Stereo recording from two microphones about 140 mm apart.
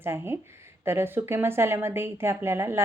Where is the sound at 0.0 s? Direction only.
15° right (ahead or behind).